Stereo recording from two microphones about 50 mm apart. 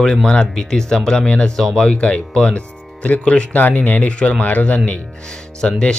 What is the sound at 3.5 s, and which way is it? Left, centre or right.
Speech, left.